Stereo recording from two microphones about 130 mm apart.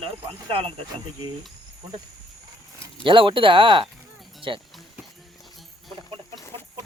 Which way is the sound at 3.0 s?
40° right (ahead or behind).